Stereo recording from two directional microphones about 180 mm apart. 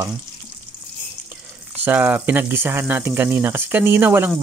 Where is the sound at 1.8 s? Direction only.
10° right (ahead or behind).